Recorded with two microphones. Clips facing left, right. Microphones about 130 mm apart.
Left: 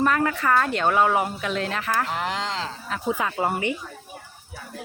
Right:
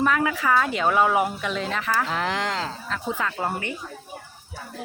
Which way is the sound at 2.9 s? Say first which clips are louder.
Left 4 dB; 10° left (ahead or behind).